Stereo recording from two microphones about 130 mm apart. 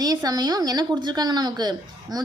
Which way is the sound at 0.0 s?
30° right (ahead or behind).